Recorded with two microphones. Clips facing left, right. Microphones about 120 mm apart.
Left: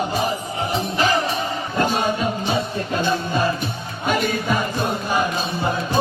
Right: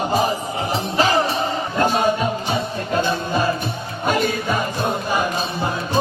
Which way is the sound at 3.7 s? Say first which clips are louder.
Right 1 dB; 45° right (ahead or behind).